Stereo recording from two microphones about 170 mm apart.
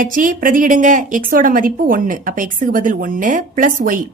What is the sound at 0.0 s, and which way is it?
A woman's voice, 55° right (ahead or behind).